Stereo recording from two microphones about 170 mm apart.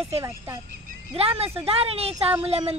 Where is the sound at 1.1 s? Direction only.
35° right (ahead or behind).